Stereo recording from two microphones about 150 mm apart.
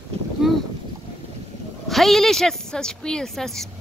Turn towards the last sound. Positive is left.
turn(degrees=0)  # may be behind; listen again after turning